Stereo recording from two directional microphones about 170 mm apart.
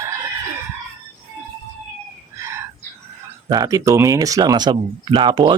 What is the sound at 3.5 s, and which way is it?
A man's voice, 20° right (ahead or behind).